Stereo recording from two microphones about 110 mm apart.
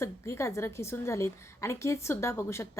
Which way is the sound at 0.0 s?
25° left (ahead or behind).